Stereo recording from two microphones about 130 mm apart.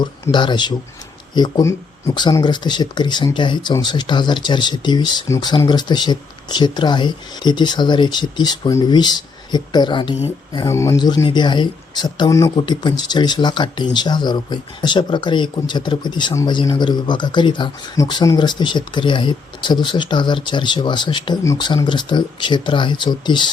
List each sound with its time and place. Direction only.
0.0 s speech: 35° left (ahead or behind)
10.7 s speech: 25° left (ahead or behind)